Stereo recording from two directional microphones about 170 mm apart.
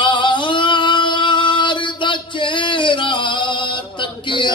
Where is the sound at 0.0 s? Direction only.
30° left (ahead or behind).